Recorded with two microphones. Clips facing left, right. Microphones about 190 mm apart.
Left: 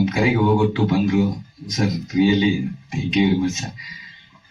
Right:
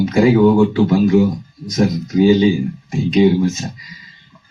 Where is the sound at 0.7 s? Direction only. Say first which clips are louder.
Right 6 dB; 45° right (ahead or behind).